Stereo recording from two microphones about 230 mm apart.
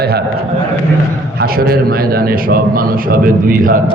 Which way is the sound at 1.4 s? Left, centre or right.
Right.